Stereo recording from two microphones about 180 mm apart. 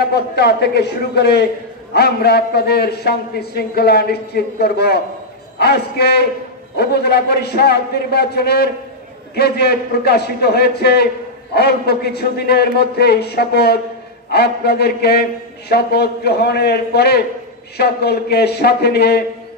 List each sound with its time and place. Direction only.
0.0 s a man's voice: 65° left (ahead or behind)